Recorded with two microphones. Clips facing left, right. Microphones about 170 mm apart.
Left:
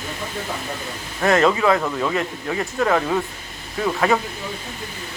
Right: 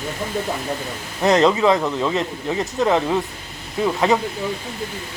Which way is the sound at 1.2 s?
20° right (ahead or behind).